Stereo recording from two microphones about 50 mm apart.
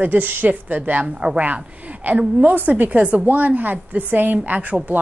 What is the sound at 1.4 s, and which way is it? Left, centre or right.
A woman's voice, right.